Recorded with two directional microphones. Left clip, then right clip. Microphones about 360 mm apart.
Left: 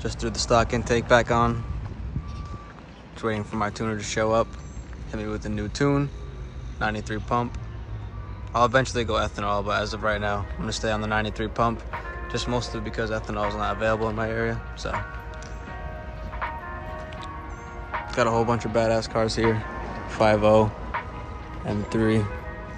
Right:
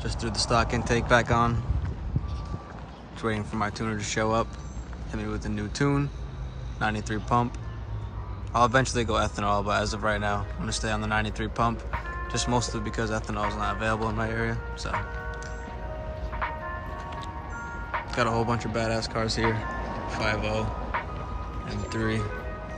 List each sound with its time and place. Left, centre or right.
0.0 s speech: centre
3.2 s speech: centre
8.5 s speech: centre
16.4 s music: centre
17.9 s speech: centre